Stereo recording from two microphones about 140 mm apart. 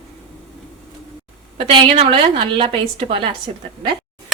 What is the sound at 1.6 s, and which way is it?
A woman's voice, 40° right (ahead or behind).